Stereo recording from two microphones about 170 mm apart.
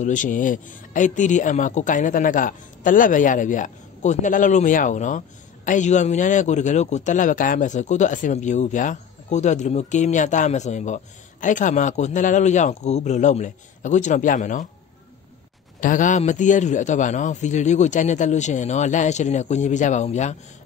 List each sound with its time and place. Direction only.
0.0 s a man's voice: 50° left (ahead or behind)
15.8 s a man's voice: 50° left (ahead or behind)